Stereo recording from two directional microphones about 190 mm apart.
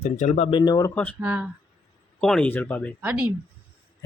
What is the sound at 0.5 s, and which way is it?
Speech, 20° left (ahead or behind).